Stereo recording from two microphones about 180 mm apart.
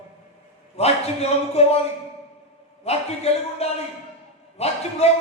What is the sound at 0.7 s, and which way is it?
A man's voice, 35° left (ahead or behind).